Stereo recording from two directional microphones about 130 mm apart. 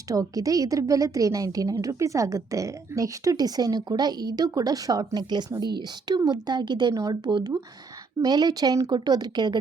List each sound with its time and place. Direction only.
0.1 s a woman's voice: 25° right (ahead or behind)